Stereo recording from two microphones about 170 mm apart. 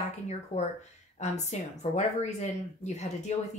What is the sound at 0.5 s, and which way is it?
A woman's voice, 40° left (ahead or behind).